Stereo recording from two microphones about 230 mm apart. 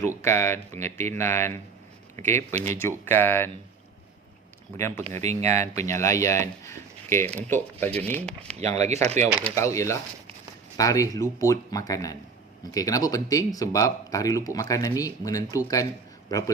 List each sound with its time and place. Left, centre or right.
0.2 s speech: centre
4.8 s speech: centre
5.2 s speech: right
5.5 s speech: centre
8.5 s speech: right
9.7 s speech: centre